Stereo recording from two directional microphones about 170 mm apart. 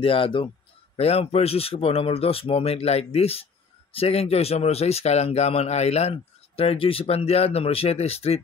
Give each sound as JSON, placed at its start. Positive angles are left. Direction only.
{"t": 0.0, "sound": "speech", "side_deg": 30}